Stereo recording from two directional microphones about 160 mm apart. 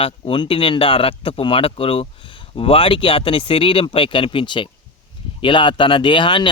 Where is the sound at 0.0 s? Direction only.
35° left (ahead or behind).